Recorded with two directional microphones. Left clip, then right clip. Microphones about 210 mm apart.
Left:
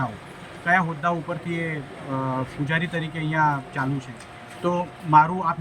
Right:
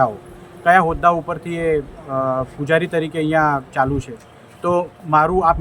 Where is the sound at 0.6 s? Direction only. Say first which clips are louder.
Right 9 dB; 25° right (ahead or behind).